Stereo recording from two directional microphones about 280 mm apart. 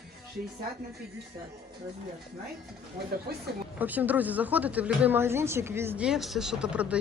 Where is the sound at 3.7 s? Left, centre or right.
Centre.